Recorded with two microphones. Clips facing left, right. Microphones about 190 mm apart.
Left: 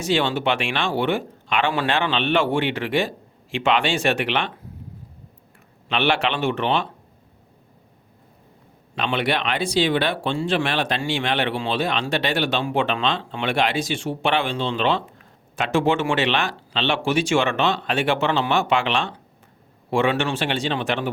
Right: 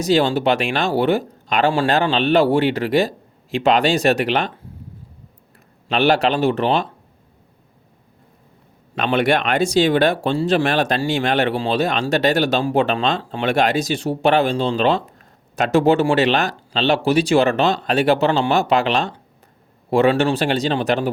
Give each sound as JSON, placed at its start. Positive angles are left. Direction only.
{"t": 0.0, "sound": "speech", "side_deg": -40}
{"t": 5.9, "sound": "speech", "side_deg": -40}
{"t": 9.0, "sound": "speech", "side_deg": -45}